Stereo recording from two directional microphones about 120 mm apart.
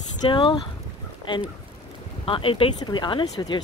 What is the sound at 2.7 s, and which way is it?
Speech, 35° left (ahead or behind).